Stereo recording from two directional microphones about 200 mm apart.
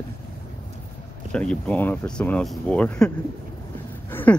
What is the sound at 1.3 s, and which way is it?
Speech, 5° left (ahead or behind).